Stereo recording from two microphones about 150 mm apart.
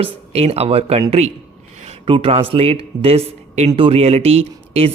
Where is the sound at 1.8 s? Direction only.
50° right (ahead or behind).